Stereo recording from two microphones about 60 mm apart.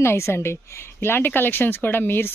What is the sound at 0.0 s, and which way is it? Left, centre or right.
A woman's voice, left.